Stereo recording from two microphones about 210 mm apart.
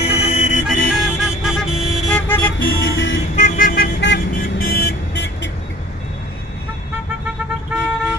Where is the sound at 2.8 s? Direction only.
60° left (ahead or behind).